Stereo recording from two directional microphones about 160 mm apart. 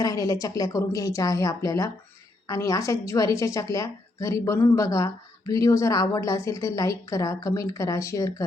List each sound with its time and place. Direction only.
0.0 s a woman's voice: 20° left (ahead or behind)